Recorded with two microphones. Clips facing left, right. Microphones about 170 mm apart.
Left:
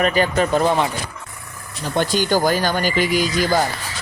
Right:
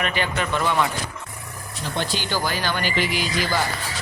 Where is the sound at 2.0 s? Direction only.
45° left (ahead or behind).